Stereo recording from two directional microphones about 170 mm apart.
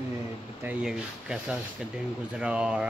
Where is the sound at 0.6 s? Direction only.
5° right (ahead or behind).